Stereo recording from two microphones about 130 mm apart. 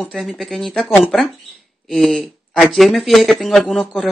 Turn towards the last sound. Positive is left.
turn(degrees=5)  # may be behind; listen again after turning